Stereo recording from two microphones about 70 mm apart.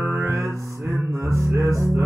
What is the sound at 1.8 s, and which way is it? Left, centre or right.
Music, right.